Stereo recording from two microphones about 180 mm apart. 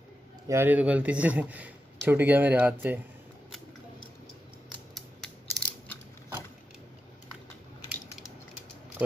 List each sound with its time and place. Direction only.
0.5 s a man's voice: 10° right (ahead or behind)
4.9 s scissors: 5° left (ahead or behind)